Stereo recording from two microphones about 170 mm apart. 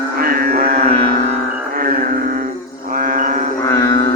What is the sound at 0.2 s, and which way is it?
Music, 60° right (ahead or behind).